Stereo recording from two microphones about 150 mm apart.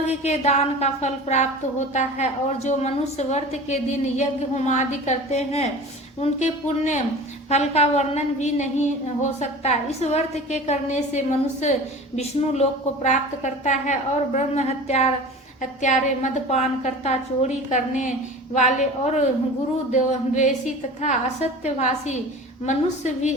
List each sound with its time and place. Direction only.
0.2 s a woman's voice: 45° left (ahead or behind)